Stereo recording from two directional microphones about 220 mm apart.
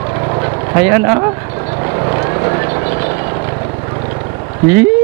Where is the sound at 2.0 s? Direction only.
20° right (ahead or behind).